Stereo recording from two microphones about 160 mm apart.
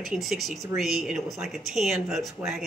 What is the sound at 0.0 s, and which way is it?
Speech, 5° right (ahead or behind).